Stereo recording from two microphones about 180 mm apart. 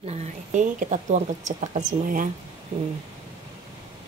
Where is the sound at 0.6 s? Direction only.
45° right (ahead or behind).